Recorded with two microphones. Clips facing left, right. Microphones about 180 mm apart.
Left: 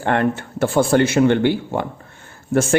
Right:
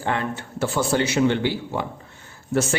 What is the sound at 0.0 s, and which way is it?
Speech, 60° left (ahead or behind).